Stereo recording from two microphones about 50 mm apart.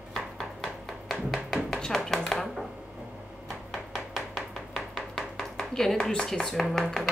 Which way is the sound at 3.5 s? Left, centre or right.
Centre.